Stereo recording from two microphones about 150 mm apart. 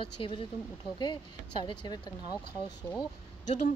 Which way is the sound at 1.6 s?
25° left (ahead or behind).